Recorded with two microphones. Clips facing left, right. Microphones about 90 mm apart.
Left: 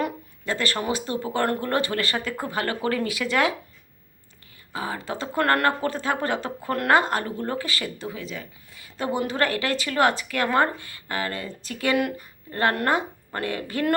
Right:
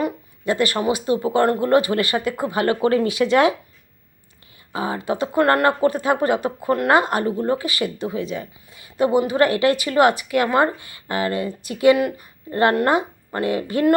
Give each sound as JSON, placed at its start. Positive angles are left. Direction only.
{"t": 0.4, "sound": "speech", "side_deg": -15}
{"t": 4.7, "sound": "speech", "side_deg": -20}
{"t": 11.9, "sound": "speech", "side_deg": -5}
{"t": 12.5, "sound": "speech", "side_deg": -15}